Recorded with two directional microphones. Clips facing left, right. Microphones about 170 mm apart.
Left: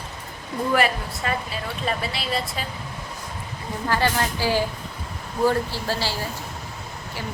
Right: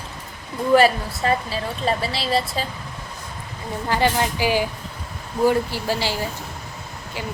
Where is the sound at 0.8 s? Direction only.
30° right (ahead or behind).